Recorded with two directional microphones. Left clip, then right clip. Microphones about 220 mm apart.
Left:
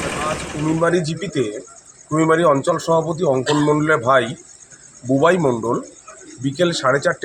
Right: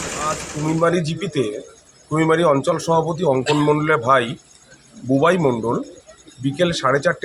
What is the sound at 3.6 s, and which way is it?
Speech, 5° left (ahead or behind).